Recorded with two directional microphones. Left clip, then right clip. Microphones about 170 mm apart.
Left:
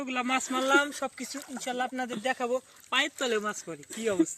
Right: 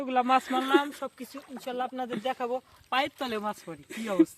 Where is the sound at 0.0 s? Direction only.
25° right (ahead or behind).